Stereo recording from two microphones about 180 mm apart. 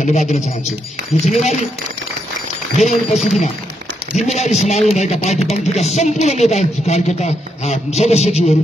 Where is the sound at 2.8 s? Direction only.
40° left (ahead or behind).